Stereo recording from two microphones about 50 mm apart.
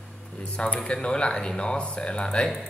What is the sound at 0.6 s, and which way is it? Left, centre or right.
A man's voice, centre.